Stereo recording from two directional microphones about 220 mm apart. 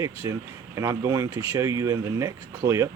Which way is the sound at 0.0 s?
15° right (ahead or behind).